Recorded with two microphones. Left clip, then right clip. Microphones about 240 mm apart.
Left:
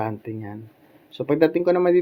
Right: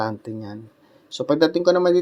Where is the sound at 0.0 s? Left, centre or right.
Right.